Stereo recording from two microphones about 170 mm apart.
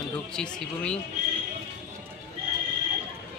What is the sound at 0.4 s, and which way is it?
Speech, 5° left (ahead or behind).